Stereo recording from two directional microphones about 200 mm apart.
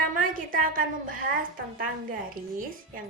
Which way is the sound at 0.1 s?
45° right (ahead or behind).